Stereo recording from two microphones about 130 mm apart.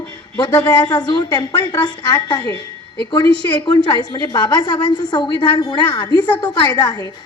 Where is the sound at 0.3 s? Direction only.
35° left (ahead or behind).